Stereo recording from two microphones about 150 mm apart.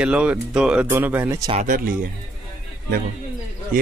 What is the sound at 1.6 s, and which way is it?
Speech, 70° right (ahead or behind).